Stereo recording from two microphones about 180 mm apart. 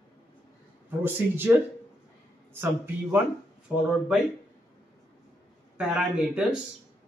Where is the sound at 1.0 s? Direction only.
10° right (ahead or behind).